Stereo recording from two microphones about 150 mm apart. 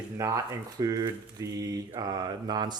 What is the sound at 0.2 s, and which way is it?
Mantra, 20° right (ahead or behind).